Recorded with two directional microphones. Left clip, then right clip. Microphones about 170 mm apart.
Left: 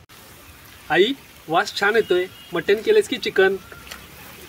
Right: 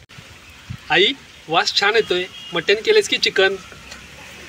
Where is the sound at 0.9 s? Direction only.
45° left (ahead or behind).